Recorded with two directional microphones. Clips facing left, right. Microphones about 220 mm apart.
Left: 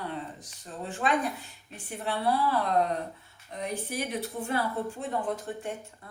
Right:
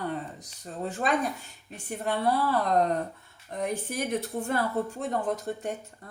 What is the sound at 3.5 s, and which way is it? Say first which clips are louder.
Speech: right 3 dB; 50° right (ahead or behind).